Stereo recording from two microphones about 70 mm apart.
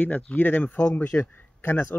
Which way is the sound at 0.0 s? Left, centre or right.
Left.